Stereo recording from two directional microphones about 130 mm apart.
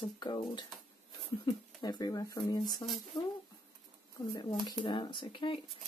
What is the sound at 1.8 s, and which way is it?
Speech, 30° left (ahead or behind).